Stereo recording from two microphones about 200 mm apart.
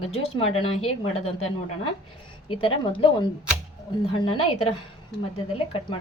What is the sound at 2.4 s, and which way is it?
A woman's voice, 25° left (ahead or behind).